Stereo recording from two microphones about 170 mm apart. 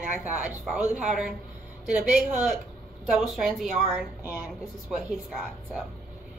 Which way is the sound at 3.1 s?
Centre (ahead or behind).